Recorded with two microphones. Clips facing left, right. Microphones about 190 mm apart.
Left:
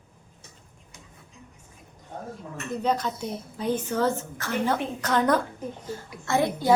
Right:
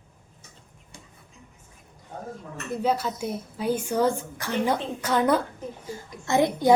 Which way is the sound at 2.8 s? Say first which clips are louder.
Right 1 dB; 10° right (ahead or behind).